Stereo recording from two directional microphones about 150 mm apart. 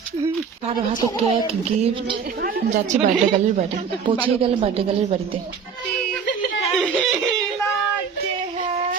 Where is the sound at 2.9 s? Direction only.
55° right (ahead or behind).